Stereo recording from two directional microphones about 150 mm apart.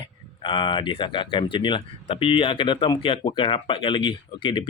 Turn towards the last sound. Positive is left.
turn(degrees=30)  # may be behind; listen again after turning